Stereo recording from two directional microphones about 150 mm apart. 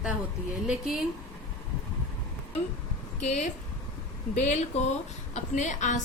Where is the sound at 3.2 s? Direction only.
50° left (ahead or behind).